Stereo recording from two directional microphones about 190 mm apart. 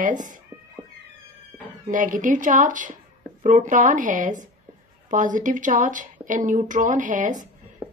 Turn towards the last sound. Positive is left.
turn(degrees=-45)  # may be behind; listen again after turning